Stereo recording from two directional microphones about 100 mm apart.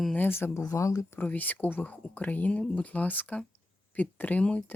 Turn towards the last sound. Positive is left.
turn(degrees=15)  # may be behind; listen again after turning